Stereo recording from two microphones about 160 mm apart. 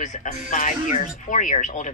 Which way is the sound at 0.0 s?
50° left (ahead or behind).